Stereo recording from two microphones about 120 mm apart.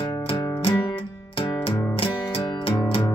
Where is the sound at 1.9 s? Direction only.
50° left (ahead or behind).